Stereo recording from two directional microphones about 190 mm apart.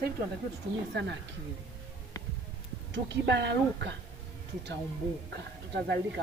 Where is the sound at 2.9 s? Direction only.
65° right (ahead or behind).